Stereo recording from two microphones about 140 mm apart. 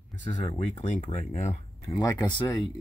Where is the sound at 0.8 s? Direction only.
65° left (ahead or behind).